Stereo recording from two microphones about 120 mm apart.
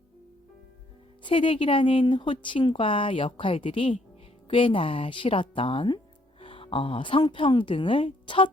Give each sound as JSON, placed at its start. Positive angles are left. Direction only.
{"t": 1.2, "sound": "a woman's voice", "side_deg": 45}